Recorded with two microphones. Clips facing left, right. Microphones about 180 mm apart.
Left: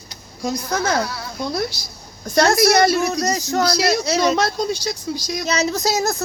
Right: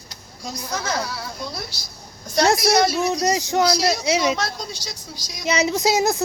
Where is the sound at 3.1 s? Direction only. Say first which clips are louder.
Even; 15° right (ahead or behind).